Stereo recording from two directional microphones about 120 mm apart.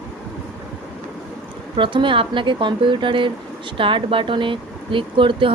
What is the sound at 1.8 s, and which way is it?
Speech, 45° right (ahead or behind).